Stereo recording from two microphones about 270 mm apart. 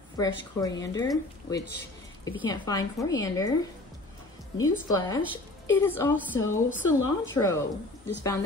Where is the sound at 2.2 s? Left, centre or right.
Centre.